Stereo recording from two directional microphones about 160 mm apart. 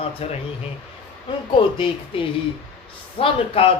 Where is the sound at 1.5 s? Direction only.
35° left (ahead or behind).